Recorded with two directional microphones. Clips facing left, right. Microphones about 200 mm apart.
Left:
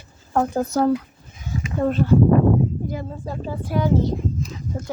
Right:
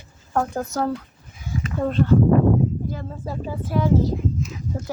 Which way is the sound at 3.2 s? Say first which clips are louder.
Even; 5° right (ahead or behind).